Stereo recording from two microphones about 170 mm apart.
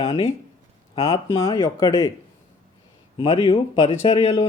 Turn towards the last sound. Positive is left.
turn(degrees=35)  # may be behind; listen again after turning